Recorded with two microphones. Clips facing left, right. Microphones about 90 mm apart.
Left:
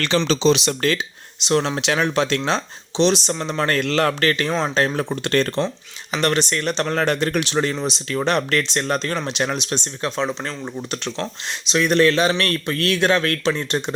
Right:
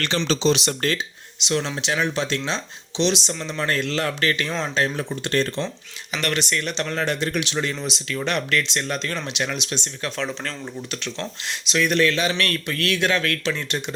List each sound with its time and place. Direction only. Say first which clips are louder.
1.4 s speech: left 5 dB; 45° left (ahead or behind); by 2.6 s 65° left (ahead or behind)
3.0 s speech: left 4 dB; 45° left (ahead or behind); by 5.6 s 60° left (ahead or behind)
6.1 s speech: left 4 dB; 35° left (ahead or behind)
10.0 s speech: left 5 dB; 20° left (ahead or behind)
11.6 s speech: left 4 dB; 30° left (ahead or behind)